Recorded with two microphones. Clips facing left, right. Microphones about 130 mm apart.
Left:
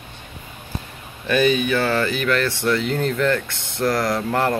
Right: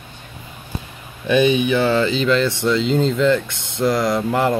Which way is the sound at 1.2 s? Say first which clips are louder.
Right 3 dB; 20° right (ahead or behind).